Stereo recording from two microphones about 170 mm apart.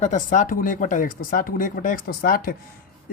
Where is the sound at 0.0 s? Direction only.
45° left (ahead or behind).